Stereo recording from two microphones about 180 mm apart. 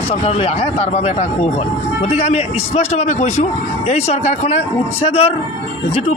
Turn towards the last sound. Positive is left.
turn(degrees=35)  # may be behind; listen again after turning